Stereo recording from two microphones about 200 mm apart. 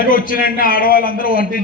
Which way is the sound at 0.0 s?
45° left (ahead or behind).